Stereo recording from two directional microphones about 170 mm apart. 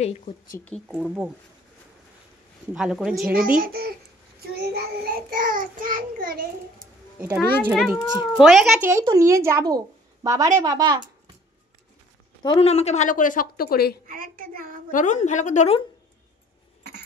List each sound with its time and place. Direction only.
0.0 s speech: 35° left (ahead or behind)
0.9 s a woman's voice: 5° right (ahead or behind)
2.7 s a woman's voice: 5° right (ahead or behind)
3.3 s child singing: 55° right (ahead or behind)
7.2 s a child's voice: 10° right (ahead or behind)
8.8 s a woman's voice: 20° right (ahead or behind)
12.4 s a woman's voice: 35° left (ahead or behind); by 13.9 s 65° left (ahead or behind)
14.0 s a woman's voice: 55° right (ahead or behind)
14.9 s a woman's voice: 50° left (ahead or behind)